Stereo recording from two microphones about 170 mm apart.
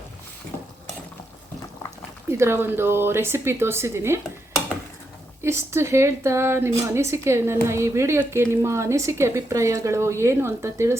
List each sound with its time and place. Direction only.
2.4 s speech: 15° right (ahead or behind)
5.4 s speech: 15° right (ahead or behind)